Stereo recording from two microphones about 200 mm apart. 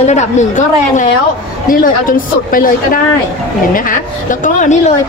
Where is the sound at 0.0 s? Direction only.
35° left (ahead or behind).